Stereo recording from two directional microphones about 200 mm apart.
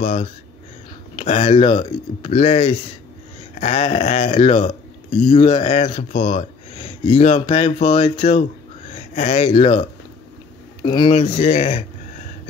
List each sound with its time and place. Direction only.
0.0 s speech: 30° left (ahead or behind)